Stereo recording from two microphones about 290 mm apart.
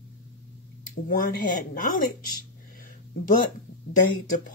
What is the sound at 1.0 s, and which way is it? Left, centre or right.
Speech, left.